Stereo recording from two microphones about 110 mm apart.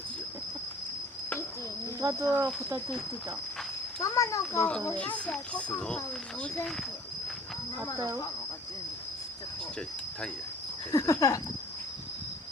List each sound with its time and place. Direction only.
2.0 s speech: 30° right (ahead or behind)
4.0 s speech: 30° left (ahead or behind)
4.9 s speech: 10° left (ahead or behind)
7.9 s speech: 25° right (ahead or behind)
10.9 s a sound: 30° left (ahead or behind)